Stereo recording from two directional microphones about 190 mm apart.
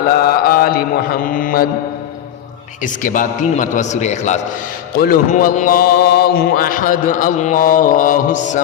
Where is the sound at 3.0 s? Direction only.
45° left (ahead or behind).